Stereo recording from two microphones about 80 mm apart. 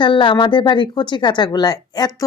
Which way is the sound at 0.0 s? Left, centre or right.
Left.